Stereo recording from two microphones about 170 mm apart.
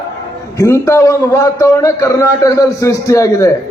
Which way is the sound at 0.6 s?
15° left (ahead or behind).